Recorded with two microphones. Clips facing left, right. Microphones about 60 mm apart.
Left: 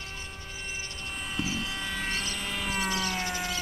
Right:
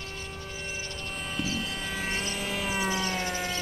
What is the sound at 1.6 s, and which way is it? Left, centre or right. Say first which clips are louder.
Vehicle: even; centre.